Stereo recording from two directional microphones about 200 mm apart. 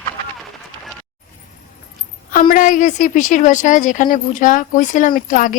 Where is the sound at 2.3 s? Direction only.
45° left (ahead or behind).